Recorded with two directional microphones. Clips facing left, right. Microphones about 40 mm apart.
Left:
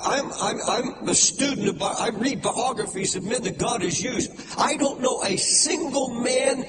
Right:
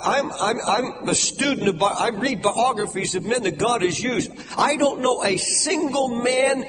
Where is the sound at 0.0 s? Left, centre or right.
Right.